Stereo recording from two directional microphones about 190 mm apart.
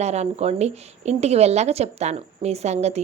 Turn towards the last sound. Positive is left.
turn(degrees=-35)  # may be behind; listen again after turning